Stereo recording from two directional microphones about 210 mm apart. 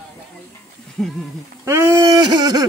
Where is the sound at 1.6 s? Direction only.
10° right (ahead or behind).